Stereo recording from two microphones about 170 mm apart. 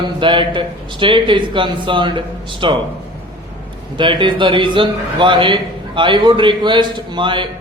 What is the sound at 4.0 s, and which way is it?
A man's voice, 30° right (ahead or behind).